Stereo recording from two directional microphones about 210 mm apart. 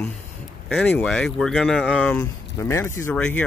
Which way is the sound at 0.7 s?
10° left (ahead or behind).